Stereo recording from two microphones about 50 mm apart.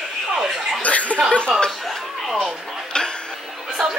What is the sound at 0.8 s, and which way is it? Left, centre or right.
Chuckle, left.